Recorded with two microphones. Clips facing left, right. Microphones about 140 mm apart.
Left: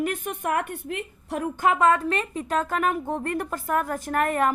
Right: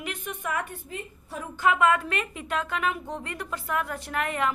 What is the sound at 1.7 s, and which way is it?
A woman's voice, 35° left (ahead or behind).